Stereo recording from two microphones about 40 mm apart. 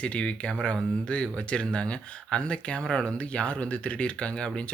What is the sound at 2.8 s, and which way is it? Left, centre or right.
Speech, centre.